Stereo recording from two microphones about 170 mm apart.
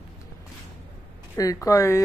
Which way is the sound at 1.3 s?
20° left (ahead or behind).